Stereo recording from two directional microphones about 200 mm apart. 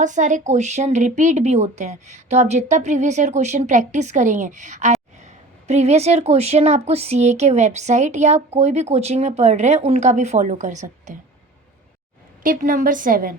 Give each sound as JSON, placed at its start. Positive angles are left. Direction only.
{"t": 0.0, "sound": "speech", "side_deg": -40}
{"t": 12.4, "sound": "a woman's voice", "side_deg": -45}